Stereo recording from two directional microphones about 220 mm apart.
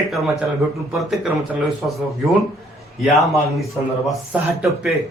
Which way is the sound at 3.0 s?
Centre (ahead or behind).